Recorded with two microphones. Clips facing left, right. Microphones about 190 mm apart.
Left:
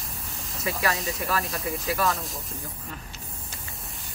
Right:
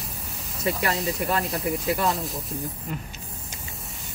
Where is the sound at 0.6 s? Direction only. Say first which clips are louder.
Right 3 dB; 25° right (ahead or behind).